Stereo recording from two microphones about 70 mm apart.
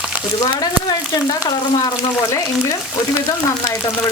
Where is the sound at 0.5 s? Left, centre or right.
Left.